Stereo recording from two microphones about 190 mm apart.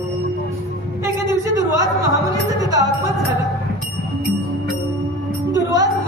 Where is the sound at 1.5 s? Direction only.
20° right (ahead or behind).